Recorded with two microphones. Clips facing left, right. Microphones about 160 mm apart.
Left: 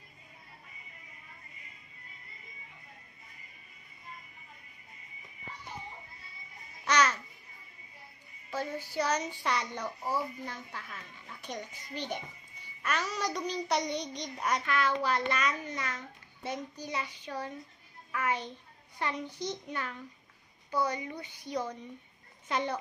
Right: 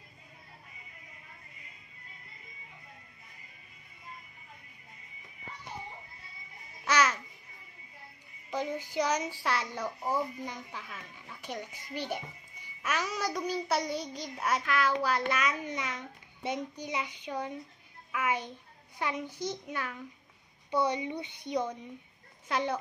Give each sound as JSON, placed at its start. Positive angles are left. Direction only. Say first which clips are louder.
{"t": 6.8, "sound": "babbling", "louder": "even", "side_deg": -10}
{"t": 8.5, "sound": "a child's voice", "louder": "right 2 dB", "side_deg": -15}
{"t": 19.2, "sound": "a child's voice", "louder": "right 1 dB", "side_deg": 15}
{"t": 19.7, "sound": "a child's voice", "louder": "right 1 dB", "side_deg": -10}
{"t": 20.7, "sound": "speech", "louder": "right 3 dB", "side_deg": -25}
{"t": 22.5, "sound": "speech", "louder": "right 1 dB", "side_deg": -5}